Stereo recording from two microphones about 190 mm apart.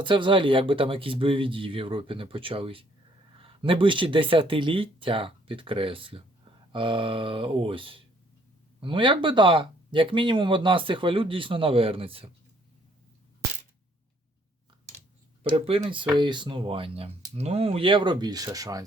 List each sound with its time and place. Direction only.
0.0 s speech: 25° right (ahead or behind)
15.4 s speech: 30° right (ahead or behind)